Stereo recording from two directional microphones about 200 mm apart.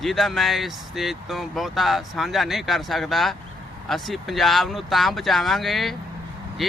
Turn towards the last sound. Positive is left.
turn(degrees=0)  # may be behind; listen again after turning